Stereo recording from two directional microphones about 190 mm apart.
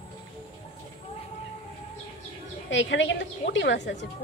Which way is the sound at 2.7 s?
75° left (ahead or behind).